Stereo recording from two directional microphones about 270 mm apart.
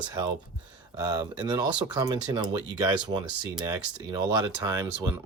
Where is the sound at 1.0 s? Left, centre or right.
Centre.